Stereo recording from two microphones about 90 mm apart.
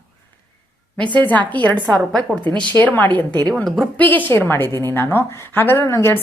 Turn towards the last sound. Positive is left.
turn(degrees=30)  # may be behind; listen again after turning